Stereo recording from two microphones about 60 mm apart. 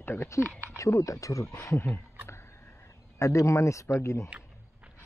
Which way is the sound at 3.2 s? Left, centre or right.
Left.